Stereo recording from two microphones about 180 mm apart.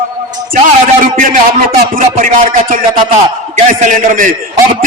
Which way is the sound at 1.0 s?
45° right (ahead or behind).